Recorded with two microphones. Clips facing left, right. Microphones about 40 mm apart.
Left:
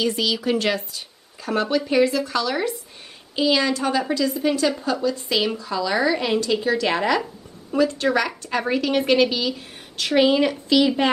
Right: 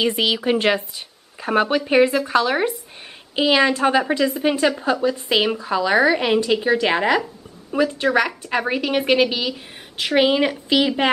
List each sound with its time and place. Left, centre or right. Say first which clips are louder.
0.0 s a woman's voice: right 3 dB; right